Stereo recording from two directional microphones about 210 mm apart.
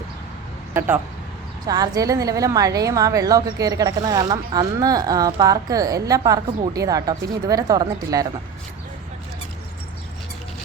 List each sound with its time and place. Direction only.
0.7 s a woman's voice: 10° right (ahead or behind)